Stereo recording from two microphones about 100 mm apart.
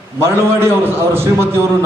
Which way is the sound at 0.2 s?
25° right (ahead or behind).